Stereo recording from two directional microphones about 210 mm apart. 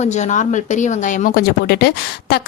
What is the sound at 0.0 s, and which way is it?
A woman's voice, 35° left (ahead or behind).